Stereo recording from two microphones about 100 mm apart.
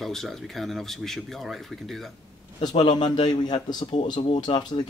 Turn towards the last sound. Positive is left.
turn(degrees=45)  # may be behind; listen again after turning